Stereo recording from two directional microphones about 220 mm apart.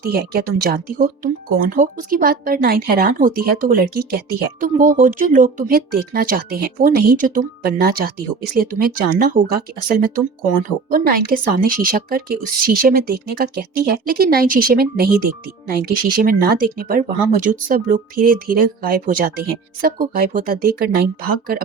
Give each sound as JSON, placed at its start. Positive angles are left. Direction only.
{"t": 0.0, "sound": "speech", "side_deg": -40}